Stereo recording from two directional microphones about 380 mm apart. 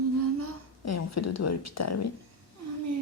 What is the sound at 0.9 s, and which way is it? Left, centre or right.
A woman's voice, left.